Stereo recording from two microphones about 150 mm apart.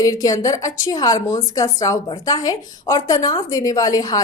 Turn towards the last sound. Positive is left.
turn(degrees=25)  # may be behind; listen again after turning